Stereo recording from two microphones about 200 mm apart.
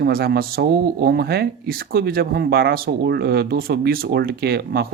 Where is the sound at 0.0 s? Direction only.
50° right (ahead or behind).